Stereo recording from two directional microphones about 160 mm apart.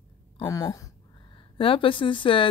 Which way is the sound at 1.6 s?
35° left (ahead or behind).